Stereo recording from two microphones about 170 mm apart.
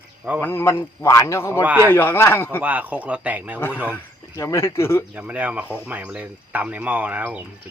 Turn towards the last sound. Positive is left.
turn(degrees=-10)  # may be behind; listen again after turning